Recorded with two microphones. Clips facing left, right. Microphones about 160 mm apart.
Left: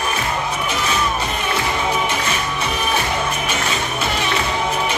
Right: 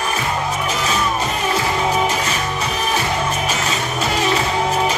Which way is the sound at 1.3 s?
40° right (ahead or behind).